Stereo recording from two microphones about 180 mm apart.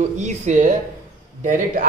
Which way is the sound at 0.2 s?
45° right (ahead or behind).